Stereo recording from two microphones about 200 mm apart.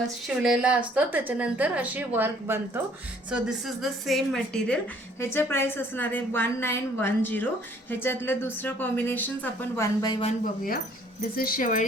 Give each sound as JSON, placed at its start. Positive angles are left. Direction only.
{"t": 0.3, "sound": "a woman's voice", "side_deg": -5}
{"t": 10.2, "sound": "speech", "side_deg": 40}